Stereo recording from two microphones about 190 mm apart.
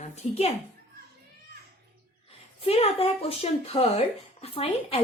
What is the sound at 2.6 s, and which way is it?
A woman's voice, 30° left (ahead or behind).